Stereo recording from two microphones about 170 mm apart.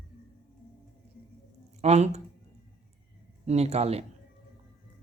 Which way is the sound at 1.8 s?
40° right (ahead or behind).